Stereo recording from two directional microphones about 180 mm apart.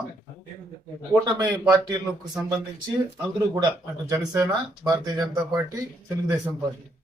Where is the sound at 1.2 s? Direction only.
20° right (ahead or behind).